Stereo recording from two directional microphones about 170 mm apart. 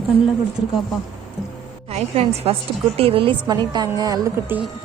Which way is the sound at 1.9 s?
35° right (ahead or behind).